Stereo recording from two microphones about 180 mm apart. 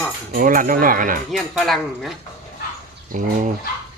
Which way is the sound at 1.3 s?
Centre (ahead or behind).